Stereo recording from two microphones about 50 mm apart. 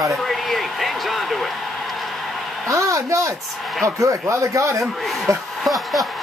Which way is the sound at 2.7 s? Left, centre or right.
Right.